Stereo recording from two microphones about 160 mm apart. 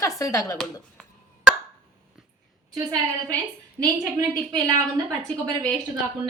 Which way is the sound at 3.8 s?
20° right (ahead or behind).